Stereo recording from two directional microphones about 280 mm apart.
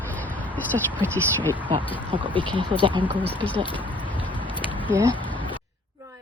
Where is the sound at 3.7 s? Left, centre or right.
Centre.